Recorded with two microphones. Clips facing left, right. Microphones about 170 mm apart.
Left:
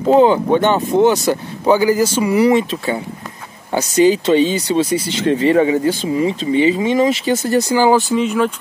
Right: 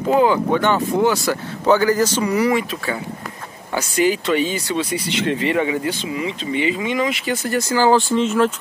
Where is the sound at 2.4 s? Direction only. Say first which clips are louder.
Left 5 dB; 25° left (ahead or behind).